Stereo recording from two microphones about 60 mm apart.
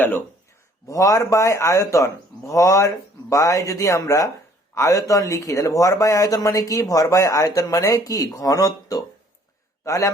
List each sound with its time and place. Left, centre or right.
0.9 s speech: left
4.7 s speech: left
9.8 s a man's voice: left